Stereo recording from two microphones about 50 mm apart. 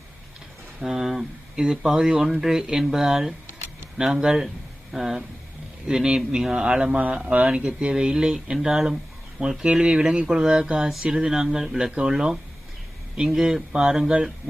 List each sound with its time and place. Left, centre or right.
0.8 s speech: centre